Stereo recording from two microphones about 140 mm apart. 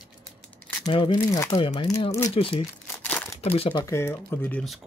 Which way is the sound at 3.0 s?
10° left (ahead or behind).